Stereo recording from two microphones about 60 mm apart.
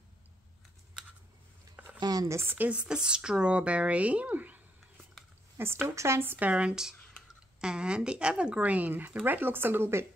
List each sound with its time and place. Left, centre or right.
2.0 s speech: right
2.4 s speech: right
2.7 s speech: centre
5.6 s speech: right
6.5 s speech: centre; by 10.0 s right